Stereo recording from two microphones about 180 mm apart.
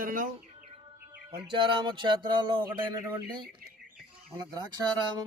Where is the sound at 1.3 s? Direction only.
25° right (ahead or behind).